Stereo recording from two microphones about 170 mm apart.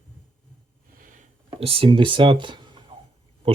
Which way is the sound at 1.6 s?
35° right (ahead or behind).